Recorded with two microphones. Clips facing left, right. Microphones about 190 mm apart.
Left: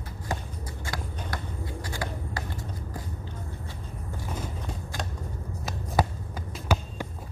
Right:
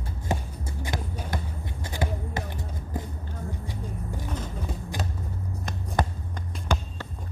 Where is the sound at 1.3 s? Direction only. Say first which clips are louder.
Right 1 dB; 20° right (ahead or behind).